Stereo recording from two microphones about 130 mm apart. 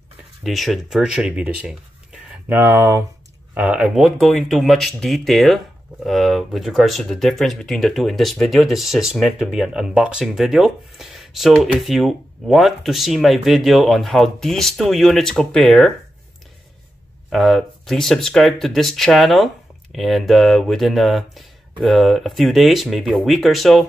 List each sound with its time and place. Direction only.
0.4 s speech: centre (ahead or behind); by 3.0 s 20° right (ahead or behind)
3.5 s speech: 10° right (ahead or behind)
17.3 s speech: centre (ahead or behind)